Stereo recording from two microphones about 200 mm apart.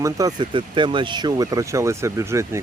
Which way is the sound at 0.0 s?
15° right (ahead or behind).